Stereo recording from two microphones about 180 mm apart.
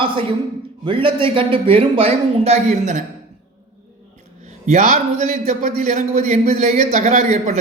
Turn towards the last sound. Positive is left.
turn(degrees=-40)  # may be behind; listen again after turning